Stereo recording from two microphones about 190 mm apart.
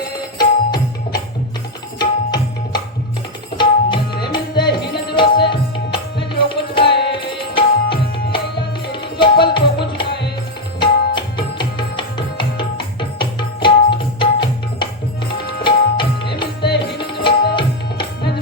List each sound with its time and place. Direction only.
0.3 s music: 20° left (ahead or behind)
2.0 s tabla: 20° left (ahead or behind)
4.3 s music: 25° left (ahead or behind)
5.1 s tabla: 25° left (ahead or behind)
10.8 s music: 25° left (ahead or behind)